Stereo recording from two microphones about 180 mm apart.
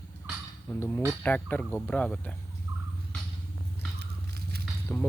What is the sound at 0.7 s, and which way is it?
Speech, 10° left (ahead or behind).